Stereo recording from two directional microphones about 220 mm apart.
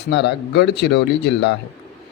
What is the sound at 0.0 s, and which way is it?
Speech, 50° left (ahead or behind).